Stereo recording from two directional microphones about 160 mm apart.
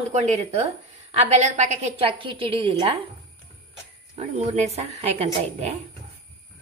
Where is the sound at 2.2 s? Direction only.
35° right (ahead or behind).